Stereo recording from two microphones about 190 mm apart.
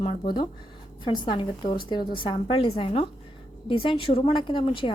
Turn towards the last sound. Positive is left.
turn(degrees=25)  # may be behind; listen again after turning